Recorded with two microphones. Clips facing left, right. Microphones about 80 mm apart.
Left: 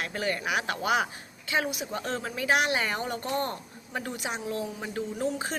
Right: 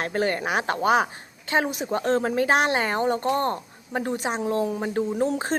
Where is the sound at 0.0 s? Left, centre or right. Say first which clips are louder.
Right 6 dB; right.